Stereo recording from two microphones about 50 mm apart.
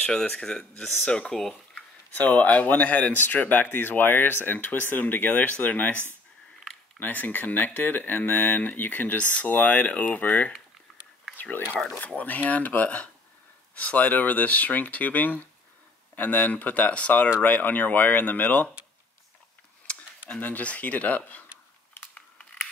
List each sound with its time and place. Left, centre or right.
0.0 s speech: centre
2.1 s speech: left
12.2 s speech: left
20.3 s speech: left
22.1 s a sound: left